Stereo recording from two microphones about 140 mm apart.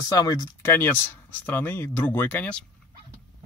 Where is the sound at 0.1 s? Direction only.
25° left (ahead or behind); by 2.6 s 10° left (ahead or behind).